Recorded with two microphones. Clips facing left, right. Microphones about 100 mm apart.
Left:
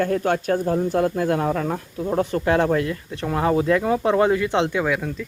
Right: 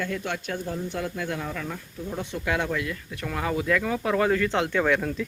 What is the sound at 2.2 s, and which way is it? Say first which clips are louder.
Speech: left 8 dB; 45° left (ahead or behind).